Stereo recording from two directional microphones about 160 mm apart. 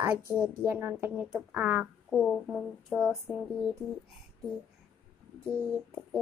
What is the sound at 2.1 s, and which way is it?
Speech, 5° left (ahead or behind).